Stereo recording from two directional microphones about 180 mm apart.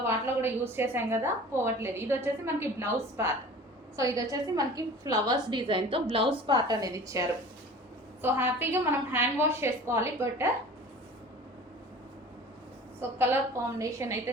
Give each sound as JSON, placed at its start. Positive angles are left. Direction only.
{"t": 0.0, "sound": "a woman's voice", "side_deg": -15}
{"t": 13.0, "sound": "a woman's voice", "side_deg": -10}